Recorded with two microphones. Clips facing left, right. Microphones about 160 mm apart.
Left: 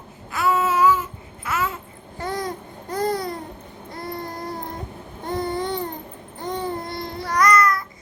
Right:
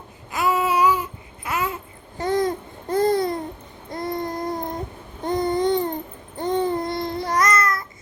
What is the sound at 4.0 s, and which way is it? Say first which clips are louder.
Baby cry: right 5 dB; 20° right (ahead or behind).